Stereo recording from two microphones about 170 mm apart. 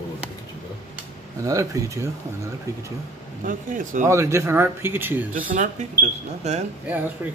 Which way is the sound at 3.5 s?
50° right (ahead or behind).